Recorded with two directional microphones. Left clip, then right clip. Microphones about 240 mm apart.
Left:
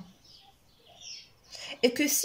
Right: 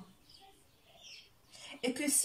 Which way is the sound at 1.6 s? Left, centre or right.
Left.